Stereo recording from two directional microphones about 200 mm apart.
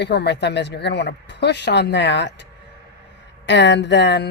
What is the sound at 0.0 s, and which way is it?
Speech, 55° left (ahead or behind).